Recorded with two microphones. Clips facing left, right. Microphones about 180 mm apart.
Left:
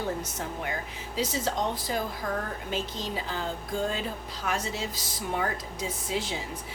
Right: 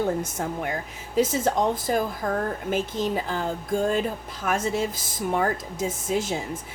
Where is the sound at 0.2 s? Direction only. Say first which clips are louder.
Right 6 dB; 50° right (ahead or behind).